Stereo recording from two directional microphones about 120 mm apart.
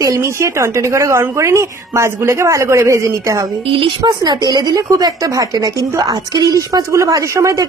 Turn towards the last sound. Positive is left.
turn(degrees=-30)  # may be behind; listen again after turning